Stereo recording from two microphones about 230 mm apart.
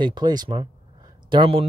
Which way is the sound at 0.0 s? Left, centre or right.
Centre.